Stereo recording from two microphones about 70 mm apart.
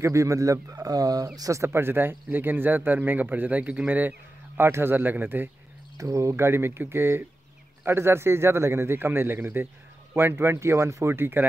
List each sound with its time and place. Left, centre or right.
0.0 s speech: right
1.6 s speech: right
5.9 s a man's voice: right